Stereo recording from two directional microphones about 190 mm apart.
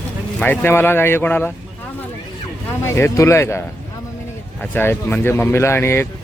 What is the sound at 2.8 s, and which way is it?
Speech, 15° left (ahead or behind).